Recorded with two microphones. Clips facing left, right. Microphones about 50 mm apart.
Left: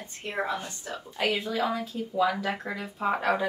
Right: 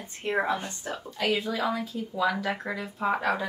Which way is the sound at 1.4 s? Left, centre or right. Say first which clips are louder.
Even; centre.